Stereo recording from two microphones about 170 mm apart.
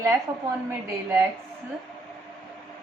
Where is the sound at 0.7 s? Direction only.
15° right (ahead or behind).